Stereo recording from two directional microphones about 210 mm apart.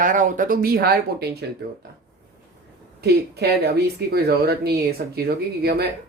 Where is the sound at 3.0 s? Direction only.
50° right (ahead or behind).